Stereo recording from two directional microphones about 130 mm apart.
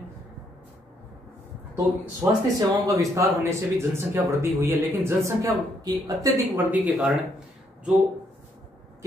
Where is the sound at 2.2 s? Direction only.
20° right (ahead or behind).